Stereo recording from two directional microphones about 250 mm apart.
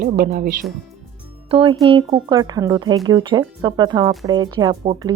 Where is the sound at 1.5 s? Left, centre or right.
Right.